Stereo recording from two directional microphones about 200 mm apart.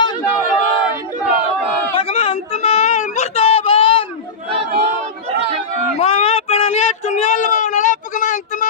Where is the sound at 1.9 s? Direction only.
30° left (ahead or behind).